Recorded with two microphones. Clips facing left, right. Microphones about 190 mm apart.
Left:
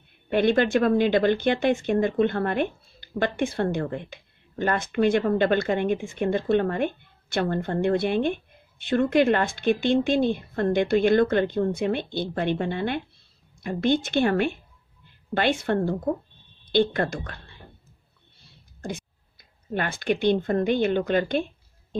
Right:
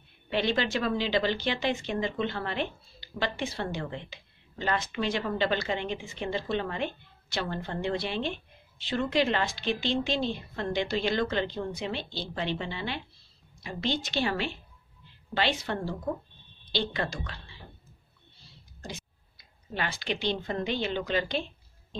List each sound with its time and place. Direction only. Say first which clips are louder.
0.3 s a woman's voice: left 8 dB; 50° left (ahead or behind)
18.8 s speech: left 8 dB; 50° left (ahead or behind)